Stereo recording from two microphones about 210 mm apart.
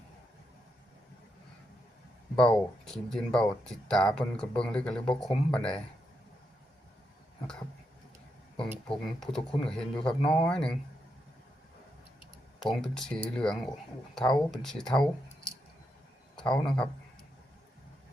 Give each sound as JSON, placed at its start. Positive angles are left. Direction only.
{"t": 2.3, "sound": "speech", "side_deg": 5}
{"t": 8.9, "sound": "speech", "side_deg": 0}
{"t": 12.7, "sound": "speech", "side_deg": 0}
{"t": 16.3, "sound": "a man's voice", "side_deg": 5}